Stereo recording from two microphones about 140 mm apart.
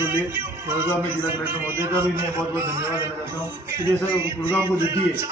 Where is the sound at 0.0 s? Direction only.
15° right (ahead or behind).